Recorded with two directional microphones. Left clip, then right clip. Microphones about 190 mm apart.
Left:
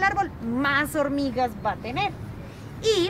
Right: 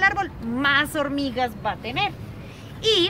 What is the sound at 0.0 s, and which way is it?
A woman's voice, 10° left (ahead or behind).